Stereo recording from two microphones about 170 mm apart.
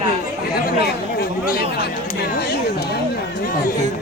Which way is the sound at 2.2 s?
70° left (ahead or behind).